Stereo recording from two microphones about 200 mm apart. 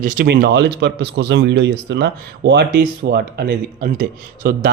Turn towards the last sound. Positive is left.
turn(degrees=-45)  # may be behind; listen again after turning